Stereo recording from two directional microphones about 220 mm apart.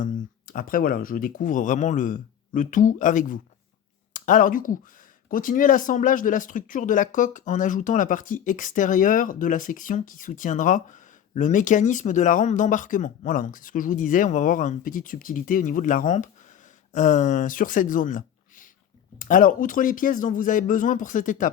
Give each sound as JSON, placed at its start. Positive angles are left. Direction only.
{"t": 0.0, "sound": "speech", "side_deg": 40}